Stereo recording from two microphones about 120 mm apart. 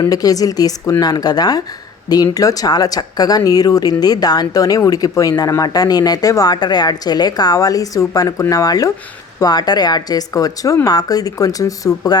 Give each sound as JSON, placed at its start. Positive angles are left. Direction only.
{"t": 0.0, "sound": "speech", "side_deg": 30}